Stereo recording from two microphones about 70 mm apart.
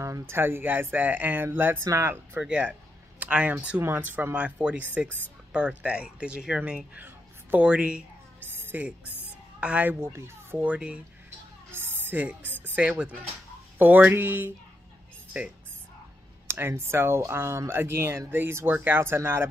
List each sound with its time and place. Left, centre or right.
0.0 s speech: right
1.9 s speech: right
2.4 s speech: centre
8.4 s a sound: right
9.6 s speech: centre
9.9 s speech: right
10.6 s speech: centre
11.7 s a sound: right
12.6 s speech: centre